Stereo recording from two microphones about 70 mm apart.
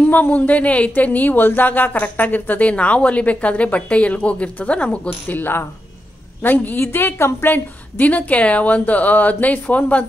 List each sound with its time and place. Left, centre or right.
0.1 s speech: left
5.4 s speech: left